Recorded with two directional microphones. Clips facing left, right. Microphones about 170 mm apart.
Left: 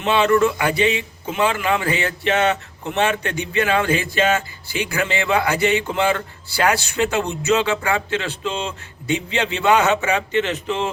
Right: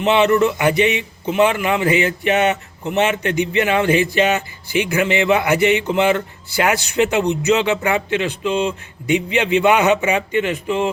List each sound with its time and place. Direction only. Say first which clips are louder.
0.1 s music: right 1 dB; 20° right (ahead or behind)
1.4 s a man's voice: right 4 dB; 20° right (ahead or behind)